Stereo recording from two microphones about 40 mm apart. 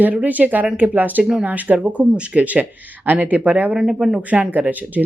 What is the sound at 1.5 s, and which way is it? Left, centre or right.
Speech, right.